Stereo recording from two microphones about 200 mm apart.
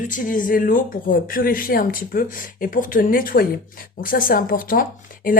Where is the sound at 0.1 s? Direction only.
40° left (ahead or behind).